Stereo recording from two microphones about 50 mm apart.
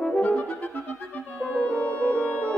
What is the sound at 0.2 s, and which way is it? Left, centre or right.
Music, left.